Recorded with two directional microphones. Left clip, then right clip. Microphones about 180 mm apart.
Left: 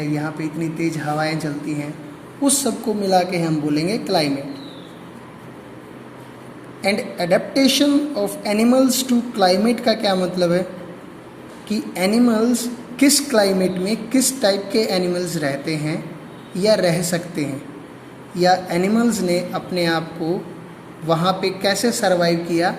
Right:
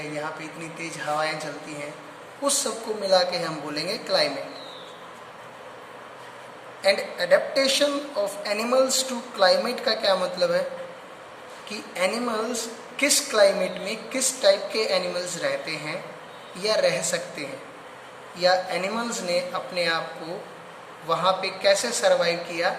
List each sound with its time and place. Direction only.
0.8 s a woman's voice: 25° left (ahead or behind)
2.4 s a woman's voice: 20° left (ahead or behind)
6.8 s a woman's voice: 25° left (ahead or behind)
11.7 s a woman's voice: 25° left (ahead or behind)
21.1 s a woman's voice: 30° left (ahead or behind)